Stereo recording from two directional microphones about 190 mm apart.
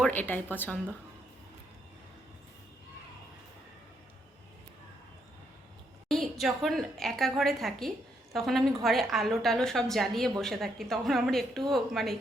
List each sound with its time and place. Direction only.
0.0 s a woman's voice: 10° left (ahead or behind)
6.1 s a woman's voice: centre (ahead or behind)